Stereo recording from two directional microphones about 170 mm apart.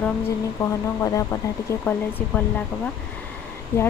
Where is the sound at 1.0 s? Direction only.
20° left (ahead or behind).